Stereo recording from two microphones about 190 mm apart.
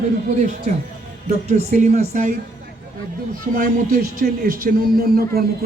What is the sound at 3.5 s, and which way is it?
A man's voice, 45° right (ahead or behind).